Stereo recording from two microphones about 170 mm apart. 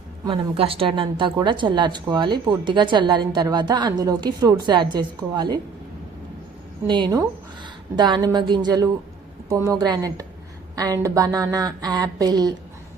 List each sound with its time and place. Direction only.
0.3 s speech: 35° right (ahead or behind)
6.8 s speech: 25° right (ahead or behind)